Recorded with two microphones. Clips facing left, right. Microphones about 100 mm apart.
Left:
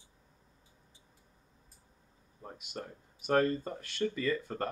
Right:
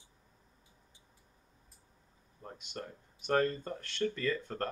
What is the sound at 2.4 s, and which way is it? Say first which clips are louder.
Speech: left 1 dB; 5° left (ahead or behind).